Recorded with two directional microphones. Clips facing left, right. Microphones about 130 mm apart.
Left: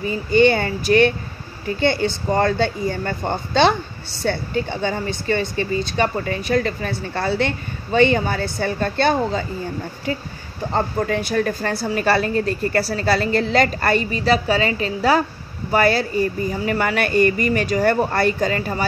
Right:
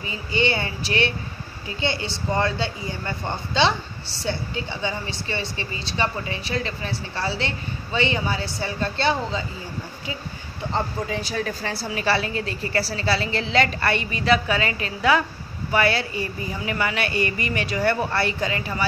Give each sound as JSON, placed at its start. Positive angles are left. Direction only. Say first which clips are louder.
{"t": 0.0, "sound": "speech", "louder": "left 9 dB", "side_deg": 50}
{"t": 10.7, "sound": "speech", "louder": "left 5 dB", "side_deg": 60}